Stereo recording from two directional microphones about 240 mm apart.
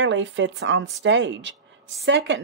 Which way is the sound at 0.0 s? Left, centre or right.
Right.